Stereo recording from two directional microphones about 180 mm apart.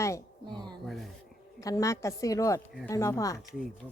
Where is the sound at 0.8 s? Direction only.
Centre (ahead or behind).